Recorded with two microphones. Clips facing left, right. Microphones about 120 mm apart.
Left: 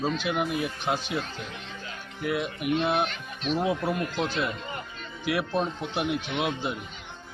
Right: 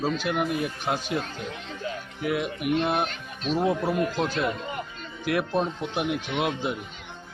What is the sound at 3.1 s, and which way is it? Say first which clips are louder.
Speech: right 1 dB; 40° right (ahead or behind).